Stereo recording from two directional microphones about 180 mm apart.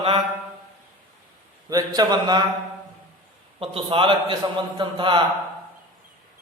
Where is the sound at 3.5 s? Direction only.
30° right (ahead or behind).